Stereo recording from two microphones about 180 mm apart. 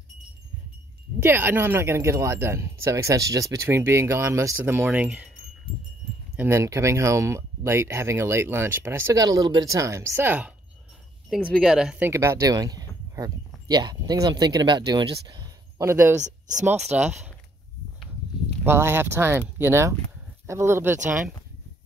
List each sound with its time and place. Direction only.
1.2 s speech: 10° right (ahead or behind)
6.3 s speech: 15° right (ahead or behind)
12.1 s speech: 15° right (ahead or behind)
18.7 s speech: 15° right (ahead or behind)